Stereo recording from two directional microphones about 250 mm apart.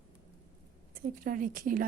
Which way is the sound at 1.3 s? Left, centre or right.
Right.